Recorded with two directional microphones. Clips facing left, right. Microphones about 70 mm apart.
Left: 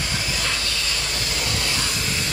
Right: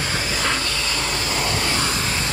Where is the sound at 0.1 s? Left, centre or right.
Right.